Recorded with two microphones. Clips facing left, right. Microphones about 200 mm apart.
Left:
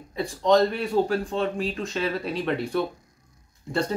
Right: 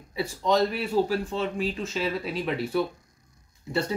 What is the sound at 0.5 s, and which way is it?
Speech, 5° right (ahead or behind).